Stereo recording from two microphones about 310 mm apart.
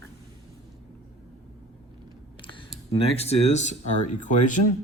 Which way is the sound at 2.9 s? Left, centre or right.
Centre.